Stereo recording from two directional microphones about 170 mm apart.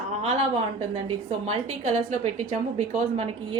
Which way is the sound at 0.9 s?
35° right (ahead or behind).